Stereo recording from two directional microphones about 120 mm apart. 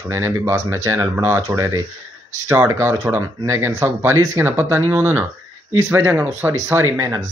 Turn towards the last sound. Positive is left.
turn(degrees=-30)  # may be behind; listen again after turning